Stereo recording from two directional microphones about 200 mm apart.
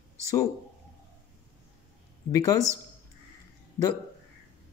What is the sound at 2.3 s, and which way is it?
Speech, 15° left (ahead or behind).